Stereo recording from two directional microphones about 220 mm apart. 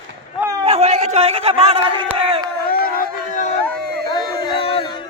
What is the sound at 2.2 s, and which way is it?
Crowd, 25° right (ahead or behind).